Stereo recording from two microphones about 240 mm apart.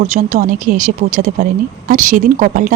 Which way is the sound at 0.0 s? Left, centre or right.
Right.